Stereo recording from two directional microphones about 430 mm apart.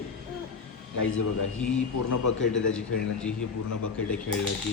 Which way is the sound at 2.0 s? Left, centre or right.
Left.